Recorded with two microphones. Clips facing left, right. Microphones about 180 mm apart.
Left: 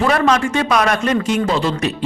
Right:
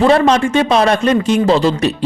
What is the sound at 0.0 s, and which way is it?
A man's voice, 25° right (ahead or behind).